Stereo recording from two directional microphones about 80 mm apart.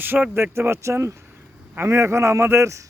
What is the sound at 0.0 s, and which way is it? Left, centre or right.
Speech, right.